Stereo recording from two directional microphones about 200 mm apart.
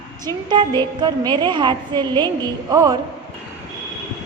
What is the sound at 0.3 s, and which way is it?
A woman's voice, 20° right (ahead or behind).